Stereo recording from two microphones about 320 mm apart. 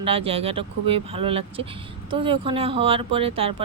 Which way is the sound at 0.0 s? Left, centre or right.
Centre.